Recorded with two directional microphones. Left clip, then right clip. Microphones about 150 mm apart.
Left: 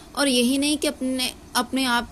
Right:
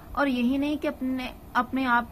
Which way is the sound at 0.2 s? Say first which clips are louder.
Left 5 dB; 55° left (ahead or behind).